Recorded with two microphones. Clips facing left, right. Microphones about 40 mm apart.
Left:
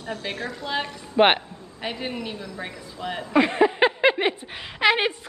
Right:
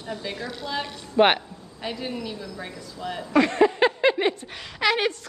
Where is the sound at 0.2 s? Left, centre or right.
Left.